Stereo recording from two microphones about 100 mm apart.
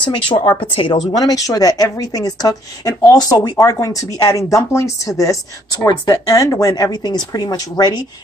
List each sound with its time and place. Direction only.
0.0 s speech: 50° left (ahead or behind)
0.6 s speech: 65° left (ahead or behind)
1.1 s speech: 40° left (ahead or behind)